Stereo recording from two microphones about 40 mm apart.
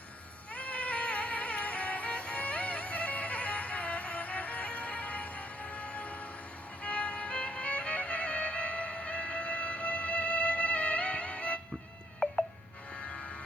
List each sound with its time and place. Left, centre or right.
0.5 s music: left
12.2 s a sound: left
12.9 s train: left